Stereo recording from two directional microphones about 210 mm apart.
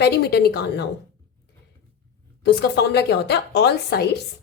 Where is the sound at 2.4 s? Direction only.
55° left (ahead or behind).